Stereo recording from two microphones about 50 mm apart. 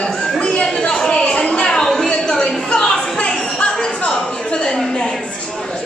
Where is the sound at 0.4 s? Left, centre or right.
Left.